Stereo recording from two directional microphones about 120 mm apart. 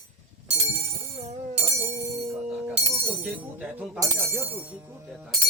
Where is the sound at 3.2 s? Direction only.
10° right (ahead or behind).